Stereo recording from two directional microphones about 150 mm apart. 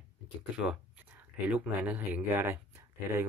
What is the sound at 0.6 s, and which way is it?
Speech, 5° right (ahead or behind).